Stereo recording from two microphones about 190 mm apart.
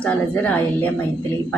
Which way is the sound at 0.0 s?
5° left (ahead or behind).